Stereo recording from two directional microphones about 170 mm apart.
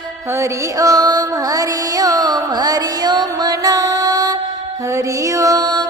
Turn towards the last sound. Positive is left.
turn(degrees=-25)  # may be behind; listen again after turning